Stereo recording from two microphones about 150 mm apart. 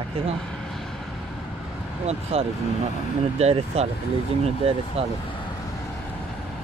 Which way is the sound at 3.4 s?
45° right (ahead or behind).